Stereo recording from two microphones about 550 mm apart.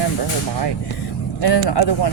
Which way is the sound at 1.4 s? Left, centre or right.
Left.